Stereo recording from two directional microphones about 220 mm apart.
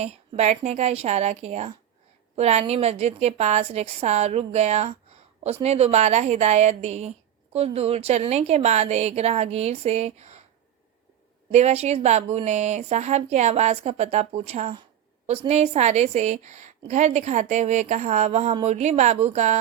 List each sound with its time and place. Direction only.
0.0 s a woman's voice: 30° right (ahead or behind)
11.5 s a woman's voice: 30° right (ahead or behind)